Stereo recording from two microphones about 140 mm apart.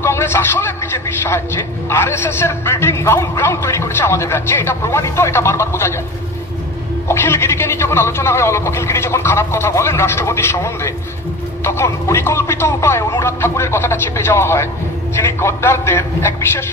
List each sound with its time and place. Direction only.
0.0 s a man's voice: 15° left (ahead or behind)
7.1 s a man's voice: 20° left (ahead or behind)